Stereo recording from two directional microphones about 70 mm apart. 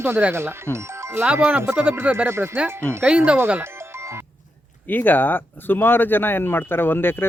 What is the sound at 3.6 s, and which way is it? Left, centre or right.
Music, right.